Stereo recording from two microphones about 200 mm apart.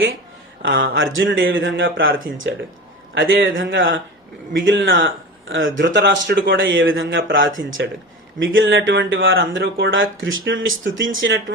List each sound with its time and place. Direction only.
0.8 s speech: 70° right (ahead or behind)